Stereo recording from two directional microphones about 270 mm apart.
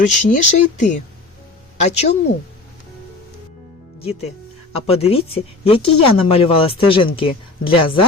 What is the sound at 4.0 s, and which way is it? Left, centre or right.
Speech, left.